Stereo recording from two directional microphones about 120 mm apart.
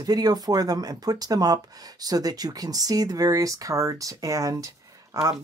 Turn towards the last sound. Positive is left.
turn(degrees=-30)  # may be behind; listen again after turning